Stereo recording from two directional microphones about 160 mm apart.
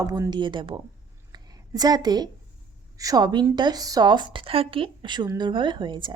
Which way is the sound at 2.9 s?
25° right (ahead or behind).